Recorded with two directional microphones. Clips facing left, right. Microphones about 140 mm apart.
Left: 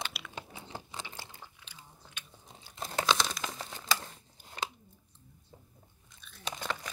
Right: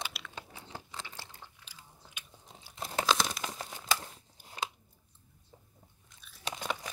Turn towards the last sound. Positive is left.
turn(degrees=-10)  # may be behind; listen again after turning